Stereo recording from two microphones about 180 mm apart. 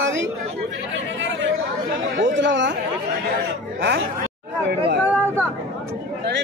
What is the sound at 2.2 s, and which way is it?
Speech, 90° right.